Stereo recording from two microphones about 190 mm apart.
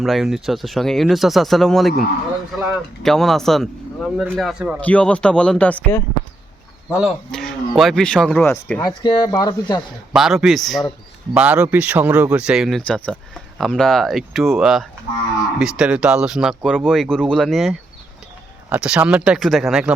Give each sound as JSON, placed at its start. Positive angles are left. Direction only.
{"t": 0.0, "sound": "speech", "side_deg": 0}
{"t": 2.6, "sound": "speech", "side_deg": -15}
{"t": 3.0, "sound": "speech", "side_deg": 0}
{"t": 4.8, "sound": "speech", "side_deg": 5}
{"t": 8.8, "sound": "speech", "side_deg": 25}
{"t": 10.1, "sound": "speech", "side_deg": 0}